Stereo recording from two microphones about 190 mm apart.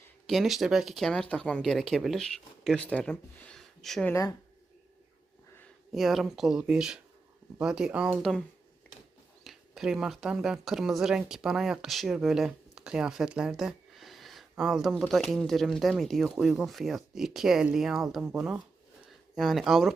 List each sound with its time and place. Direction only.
0.3 s speech: centre (ahead or behind)
4.1 s speech: 15° left (ahead or behind)
5.9 s speech: centre (ahead or behind)
9.4 s speech: centre (ahead or behind)